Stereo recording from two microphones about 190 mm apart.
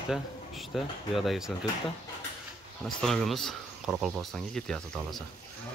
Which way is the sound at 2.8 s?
Centre (ahead or behind).